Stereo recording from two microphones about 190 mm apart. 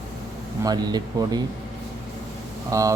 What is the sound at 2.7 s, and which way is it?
Speech, 20° right (ahead or behind).